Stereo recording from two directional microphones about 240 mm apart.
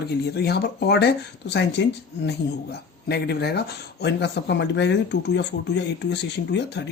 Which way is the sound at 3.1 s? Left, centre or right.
Left.